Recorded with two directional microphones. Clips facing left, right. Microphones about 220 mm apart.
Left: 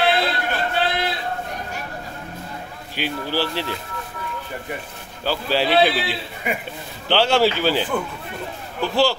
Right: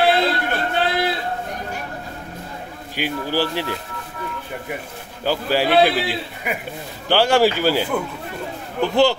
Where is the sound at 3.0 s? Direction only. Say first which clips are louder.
Right 2 dB; 15° right (ahead or behind).